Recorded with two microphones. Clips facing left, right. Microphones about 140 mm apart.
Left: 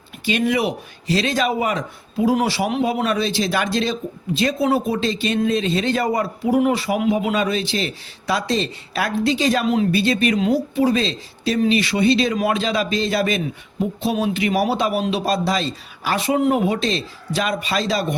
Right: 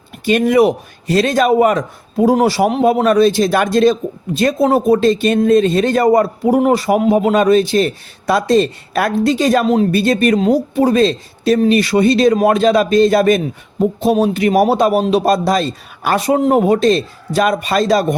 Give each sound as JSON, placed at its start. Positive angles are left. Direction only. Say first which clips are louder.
{"t": 0.3, "sound": "speech", "louder": "right 8 dB", "side_deg": -50}